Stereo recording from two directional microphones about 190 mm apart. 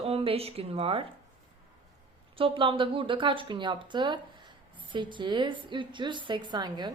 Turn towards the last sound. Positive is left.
turn(degrees=-20)  # may be behind; listen again after turning